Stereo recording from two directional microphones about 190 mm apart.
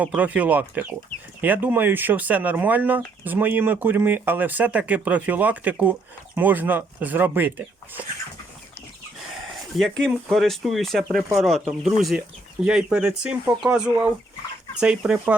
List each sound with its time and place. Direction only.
0.0 s speech: 10° right (ahead or behind)
9.7 s speech: centre (ahead or behind)